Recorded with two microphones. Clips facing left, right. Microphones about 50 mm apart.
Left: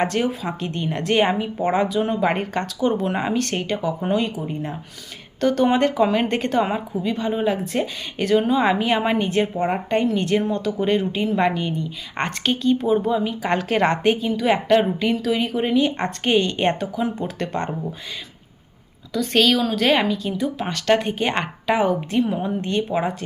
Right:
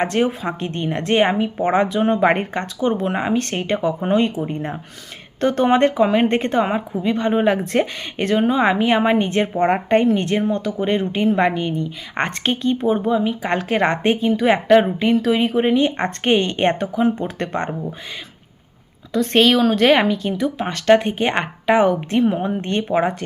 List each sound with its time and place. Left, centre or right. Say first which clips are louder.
0.0 s a woman's voice: right 3 dB; right
1.8 s a woman's voice: right 4 dB; right; by 3.3 s centre
3.6 s speech: right 3 dB; right
6.0 s a woman's voice: right 3 dB; right
6.6 s a woman's voice: right 1 dB; centre
6.9 s a woman's voice: right 4 dB; right
7.4 s speech: right 4 dB; right
8.4 s a woman's voice: right 3 dB; right
11.1 s a woman's voice: right 3 dB; right; by 13.9 s centre
13.9 s a woman's voice: right 2 dB; right
14.4 s speech: right 3 dB; centre
19.1 s speech: right 3 dB; right
20.7 s a woman's voice: right 5 dB; right